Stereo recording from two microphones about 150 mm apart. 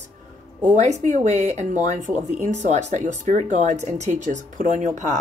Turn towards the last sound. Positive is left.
turn(degrees=-55)  # may be behind; listen again after turning